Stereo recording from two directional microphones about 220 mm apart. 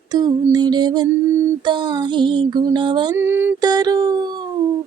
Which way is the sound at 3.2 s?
10° right (ahead or behind).